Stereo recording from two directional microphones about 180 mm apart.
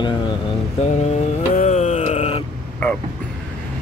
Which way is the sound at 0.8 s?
40° left (ahead or behind).